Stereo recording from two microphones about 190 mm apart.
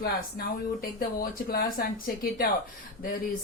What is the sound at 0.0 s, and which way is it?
Speech, 50° left (ahead or behind).